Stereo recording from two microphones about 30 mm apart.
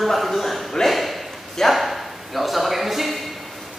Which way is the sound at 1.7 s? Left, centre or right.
Centre.